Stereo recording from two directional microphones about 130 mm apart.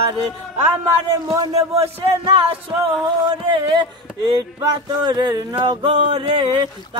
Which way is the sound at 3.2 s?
35° right (ahead or behind).